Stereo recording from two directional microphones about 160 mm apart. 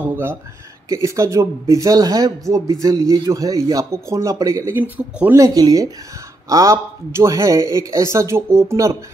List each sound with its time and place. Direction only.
0.0 s speech: 15° right (ahead or behind)
5.4 s speech: 20° right (ahead or behind)